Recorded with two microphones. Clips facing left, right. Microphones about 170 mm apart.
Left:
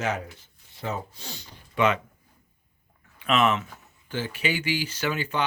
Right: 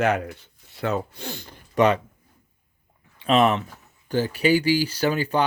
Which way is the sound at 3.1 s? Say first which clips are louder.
Right 4 dB; 35° right (ahead or behind).